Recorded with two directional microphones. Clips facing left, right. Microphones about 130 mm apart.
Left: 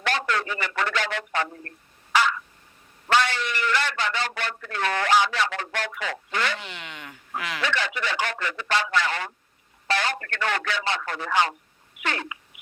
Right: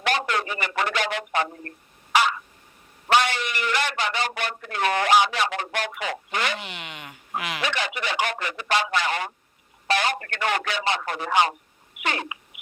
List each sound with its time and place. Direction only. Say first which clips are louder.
0.0 s a man's voice: right 1 dB; 15° right (ahead or behind)
2.1 s frog: right 1 dB; 15° right (ahead or behind)
3.1 s a man's voice: right 1 dB; 15° right (ahead or behind)